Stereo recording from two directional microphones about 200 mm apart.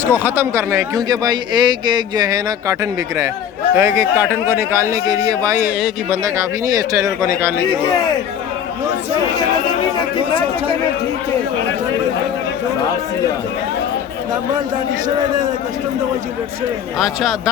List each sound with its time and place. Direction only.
0.0 s speech: 10° right (ahead or behind)
3.8 s speech: 15° right (ahead or behind)
17.0 s speech: centre (ahead or behind)